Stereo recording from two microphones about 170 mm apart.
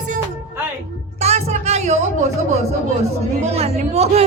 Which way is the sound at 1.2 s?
40° right (ahead or behind).